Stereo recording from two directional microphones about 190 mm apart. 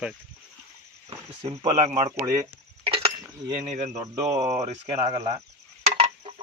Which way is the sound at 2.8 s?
30° right (ahead or behind).